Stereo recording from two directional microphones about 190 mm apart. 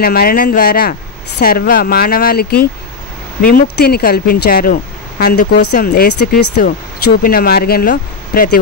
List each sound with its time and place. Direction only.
0.0 s speech: 55° left (ahead or behind)